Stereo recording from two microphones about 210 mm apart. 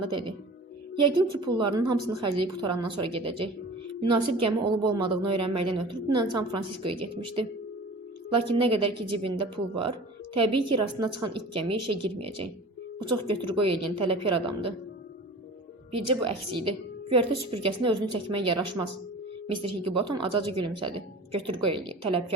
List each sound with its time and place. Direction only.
0.0 s a woman's voice: 25° right (ahead or behind)
4.6 s a woman's voice: 20° right (ahead or behind)
16.0 s a woman's voice: 25° right (ahead or behind)